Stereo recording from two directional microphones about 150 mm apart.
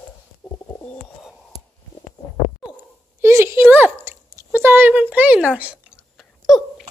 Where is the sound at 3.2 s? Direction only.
20° right (ahead or behind); by 6.9 s centre (ahead or behind).